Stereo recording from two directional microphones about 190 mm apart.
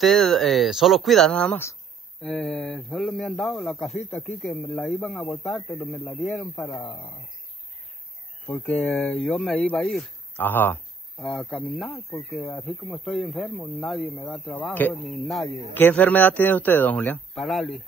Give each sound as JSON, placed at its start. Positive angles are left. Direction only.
{"t": 0.0, "sound": "speech", "side_deg": 0}
{"t": 6.8, "sound": "speech", "side_deg": 25}
{"t": 8.5, "sound": "speech", "side_deg": 5}